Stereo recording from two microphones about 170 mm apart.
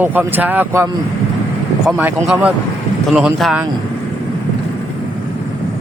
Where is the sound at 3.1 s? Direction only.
Centre (ahead or behind).